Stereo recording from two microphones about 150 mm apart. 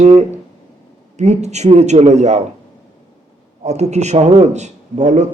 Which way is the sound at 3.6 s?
50° right (ahead or behind).